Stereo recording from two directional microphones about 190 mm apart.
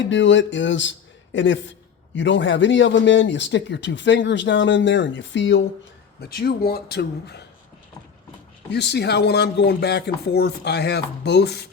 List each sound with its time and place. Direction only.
0.1 s a man's voice: 75° left (ahead or behind)
6.1 s speech: 55° left (ahead or behind)
8.7 s speech: 60° left (ahead or behind)